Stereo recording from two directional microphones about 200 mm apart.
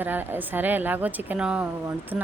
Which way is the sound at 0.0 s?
10° right (ahead or behind).